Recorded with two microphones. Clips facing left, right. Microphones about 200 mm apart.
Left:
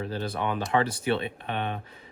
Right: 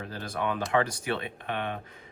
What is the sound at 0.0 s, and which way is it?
Speech, 30° left (ahead or behind).